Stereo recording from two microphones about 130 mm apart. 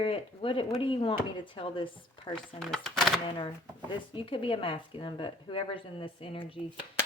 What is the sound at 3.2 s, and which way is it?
A woman's voice, 40° left (ahead or behind).